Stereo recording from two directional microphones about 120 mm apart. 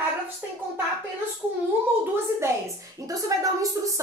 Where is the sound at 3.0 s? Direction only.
30° right (ahead or behind).